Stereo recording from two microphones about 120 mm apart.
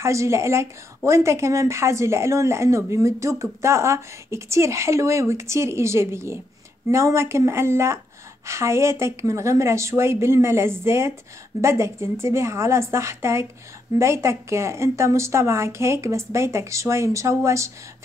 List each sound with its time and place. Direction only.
0.0 s a woman's voice: 25° right (ahead or behind)